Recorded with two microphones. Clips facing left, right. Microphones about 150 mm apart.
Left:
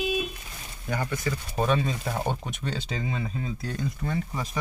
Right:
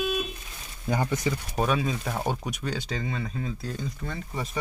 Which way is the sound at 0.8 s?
25° right (ahead or behind).